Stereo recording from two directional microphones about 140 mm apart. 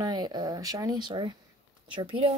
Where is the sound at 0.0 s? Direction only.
30° right (ahead or behind).